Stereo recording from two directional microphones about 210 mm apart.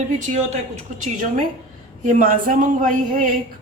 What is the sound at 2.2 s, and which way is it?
Speech, 40° right (ahead or behind).